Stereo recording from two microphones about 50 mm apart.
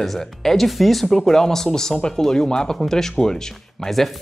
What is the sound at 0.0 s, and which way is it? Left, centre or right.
Speech, centre.